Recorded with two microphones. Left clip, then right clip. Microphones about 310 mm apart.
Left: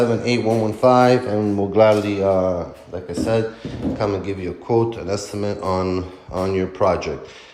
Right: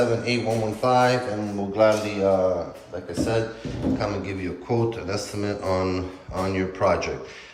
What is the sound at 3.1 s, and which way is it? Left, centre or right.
A man's voice, left.